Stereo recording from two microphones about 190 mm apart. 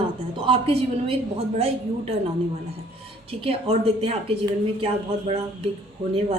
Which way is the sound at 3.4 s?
30° right (ahead or behind).